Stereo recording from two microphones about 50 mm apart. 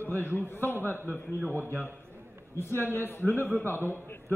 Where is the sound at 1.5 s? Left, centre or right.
Right.